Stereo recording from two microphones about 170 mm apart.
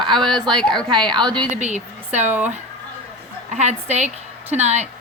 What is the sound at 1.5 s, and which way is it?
Speech, 45° right (ahead or behind).